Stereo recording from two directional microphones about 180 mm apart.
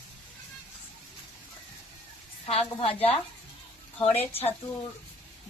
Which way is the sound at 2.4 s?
35° left (ahead or behind).